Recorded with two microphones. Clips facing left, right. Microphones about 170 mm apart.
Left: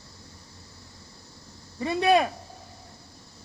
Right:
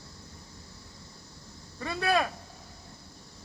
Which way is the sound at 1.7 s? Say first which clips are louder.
Left 6 dB; 20° left (ahead or behind).